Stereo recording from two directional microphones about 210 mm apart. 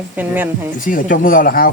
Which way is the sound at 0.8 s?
40° left (ahead or behind).